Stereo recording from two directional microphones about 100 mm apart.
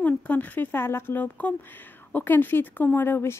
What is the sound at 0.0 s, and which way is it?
Speech, 15° left (ahead or behind).